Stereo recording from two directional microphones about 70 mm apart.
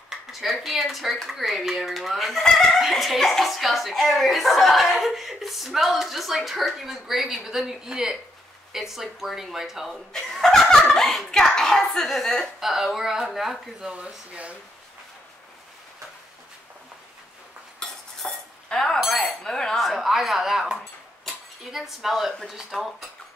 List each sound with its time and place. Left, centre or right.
0.3 s speech: centre
10.1 s speech: centre
13.8 s speech: centre
18.2 s cutlery: centre
18.9 s chink: centre
21.7 s speech: centre